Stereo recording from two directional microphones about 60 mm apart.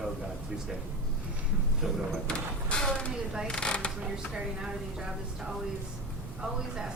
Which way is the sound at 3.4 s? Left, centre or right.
Centre.